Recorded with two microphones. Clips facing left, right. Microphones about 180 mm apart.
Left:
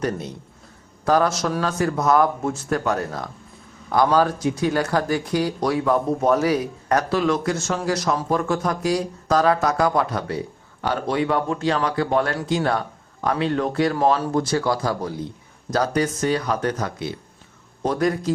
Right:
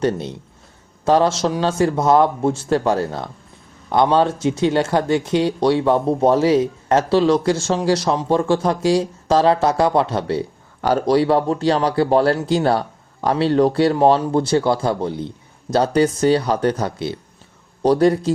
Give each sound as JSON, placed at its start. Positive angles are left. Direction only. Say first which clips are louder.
{"t": 0.0, "sound": "speech", "louder": "right 5 dB", "side_deg": -30}
{"t": 10.8, "sound": "a man's voice", "louder": "right 7 dB", "side_deg": -40}